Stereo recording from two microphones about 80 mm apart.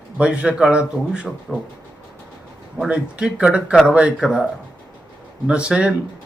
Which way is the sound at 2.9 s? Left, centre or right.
Centre.